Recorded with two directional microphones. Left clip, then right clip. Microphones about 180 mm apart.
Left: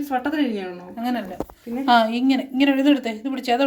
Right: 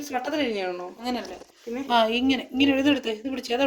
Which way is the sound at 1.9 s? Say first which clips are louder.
Left 4 dB; 35° right (ahead or behind).